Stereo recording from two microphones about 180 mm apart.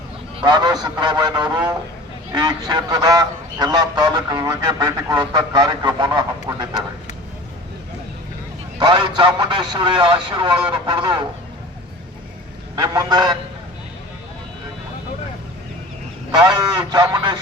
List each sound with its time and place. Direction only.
0.3 s speech: 25° right (ahead or behind)
8.8 s speech: 25° right (ahead or behind)
12.7 s speech: 25° right (ahead or behind)
16.3 s speech: 25° right (ahead or behind)